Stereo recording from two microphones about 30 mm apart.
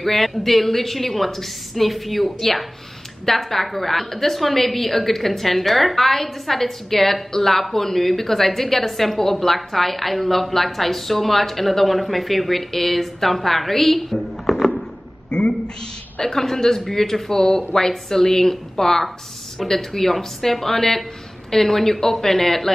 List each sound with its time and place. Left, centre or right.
0.0 s a woman's voice: centre
15.3 s a sound: left
16.3 s a woman's voice: centre